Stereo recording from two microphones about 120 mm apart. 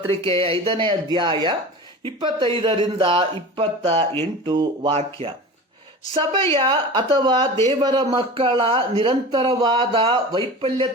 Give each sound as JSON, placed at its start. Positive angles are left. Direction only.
{"t": 0.1, "sound": "speech", "side_deg": -50}
{"t": 4.2, "sound": "speech", "side_deg": -40}
{"t": 6.1, "sound": "speech", "side_deg": -45}